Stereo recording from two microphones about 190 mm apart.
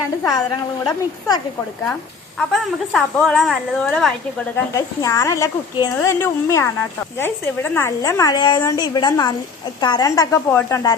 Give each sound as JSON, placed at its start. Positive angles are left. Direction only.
{"t": 0.2, "sound": "a woman's voice", "side_deg": 20}
{"t": 2.4, "sound": "a woman's voice", "side_deg": 5}
{"t": 5.0, "sound": "a woman's voice", "side_deg": 15}